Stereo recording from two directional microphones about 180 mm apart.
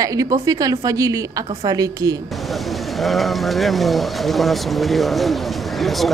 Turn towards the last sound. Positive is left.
turn(degrees=0)  # may be behind; listen again after turning